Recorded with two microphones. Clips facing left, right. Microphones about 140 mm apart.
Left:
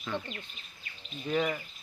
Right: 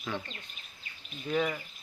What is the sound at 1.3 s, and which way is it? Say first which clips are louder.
Speech: even; 5° left (ahead or behind).